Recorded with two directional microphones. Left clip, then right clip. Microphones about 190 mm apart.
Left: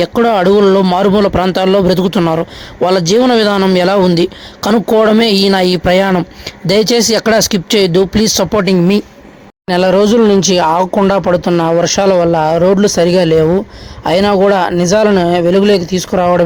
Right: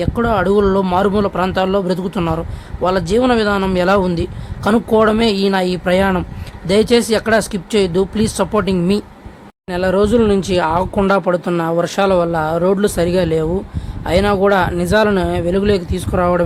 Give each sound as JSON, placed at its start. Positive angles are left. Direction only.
{"t": 0.0, "sound": "speech", "side_deg": 35}